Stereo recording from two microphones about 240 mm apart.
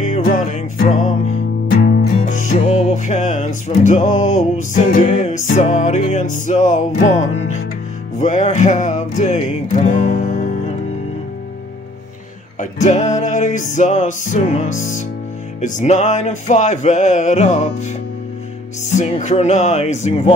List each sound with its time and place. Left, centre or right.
0.0 s music: left
12.5 s music: left
18.9 s music: left